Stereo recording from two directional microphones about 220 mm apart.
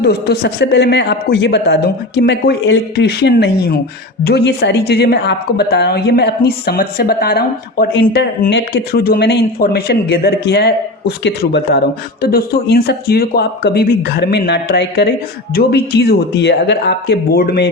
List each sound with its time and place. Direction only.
0.0 s a woman's voice: 50° left (ahead or behind)